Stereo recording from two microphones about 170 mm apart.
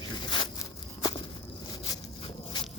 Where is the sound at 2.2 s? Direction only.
30° left (ahead or behind).